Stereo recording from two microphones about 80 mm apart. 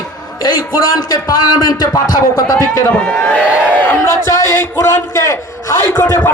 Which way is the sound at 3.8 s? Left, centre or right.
Left.